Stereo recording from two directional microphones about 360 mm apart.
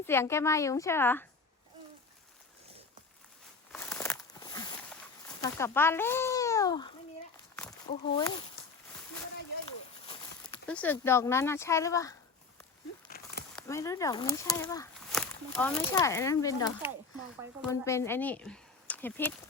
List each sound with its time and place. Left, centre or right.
0.0 s speech: centre
3.7 s a sound: centre
5.4 s speech: centre
10.7 s speech: centre
13.1 s a sound: left
13.6 s speech: centre
17.6 s speech: centre